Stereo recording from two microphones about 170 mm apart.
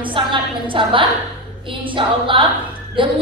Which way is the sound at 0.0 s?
30° right (ahead or behind).